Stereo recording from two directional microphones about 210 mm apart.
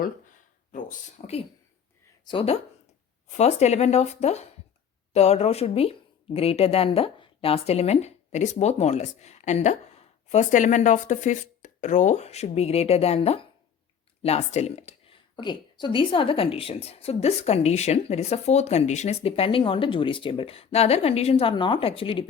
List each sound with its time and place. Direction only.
0.7 s a woman's voice: 40° left (ahead or behind)
2.2 s a woman's voice: 25° left (ahead or behind)